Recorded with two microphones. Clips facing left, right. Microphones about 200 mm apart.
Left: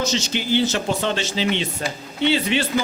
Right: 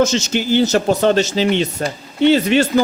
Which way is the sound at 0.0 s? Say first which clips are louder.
Right 7 dB; 45° right (ahead or behind).